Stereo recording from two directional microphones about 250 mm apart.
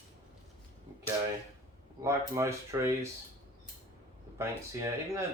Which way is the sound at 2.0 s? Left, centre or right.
Centre.